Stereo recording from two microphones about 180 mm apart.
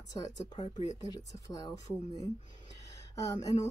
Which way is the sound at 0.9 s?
20° left (ahead or behind).